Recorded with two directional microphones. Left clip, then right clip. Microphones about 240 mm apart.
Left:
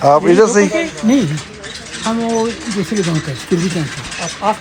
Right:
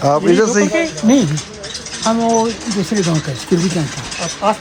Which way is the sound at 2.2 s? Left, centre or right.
Right.